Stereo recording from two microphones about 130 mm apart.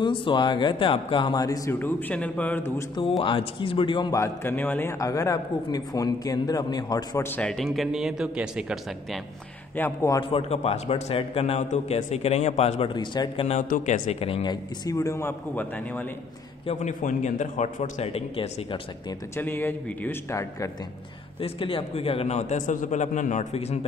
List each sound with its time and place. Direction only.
0.0 s speech: 35° left (ahead or behind)
1.7 s a man's voice: 15° left (ahead or behind)
3.0 s speech: 45° left (ahead or behind)
4.2 s a man's voice: 20° left (ahead or behind)
4.9 s a man's voice: 25° left (ahead or behind)
7.2 s a man's voice: 10° left (ahead or behind); by 9.2 s 5° right (ahead or behind)
9.8 s a man's voice: 20° left (ahead or behind)
10.3 s a man's voice: 50° left (ahead or behind)
12.9 s speech: 35° left (ahead or behind)
13.5 s speech: 70° left (ahead or behind)
14.3 s a man's voice: 35° left (ahead or behind); by 16.1 s 15° left (ahead or behind)
17.0 s a man's voice: 70° left (ahead or behind); by 19.1 s 40° left (ahead or behind)
19.3 s a man's voice: 20° left (ahead or behind)
21.4 s a man's voice: 40° left (ahead or behind)